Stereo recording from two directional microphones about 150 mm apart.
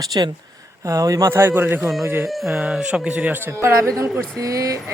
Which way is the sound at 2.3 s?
5° right (ahead or behind).